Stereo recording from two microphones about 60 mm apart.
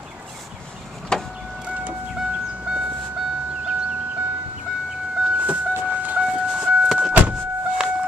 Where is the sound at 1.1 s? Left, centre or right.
Centre.